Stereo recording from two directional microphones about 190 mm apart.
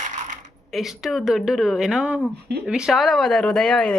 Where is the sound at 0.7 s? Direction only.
Centre (ahead or behind).